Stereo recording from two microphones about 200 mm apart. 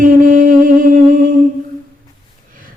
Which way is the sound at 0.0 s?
45° right (ahead or behind).